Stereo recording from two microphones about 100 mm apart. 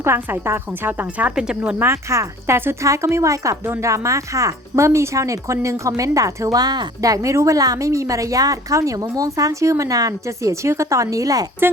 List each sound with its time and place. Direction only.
0.0 s a woman's voice: 25° right (ahead or behind); by 1.7 s 10° right (ahead or behind)
1.8 s speech: 25° right (ahead or behind)